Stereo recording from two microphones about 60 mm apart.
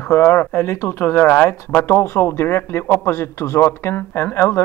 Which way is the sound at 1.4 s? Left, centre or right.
Left.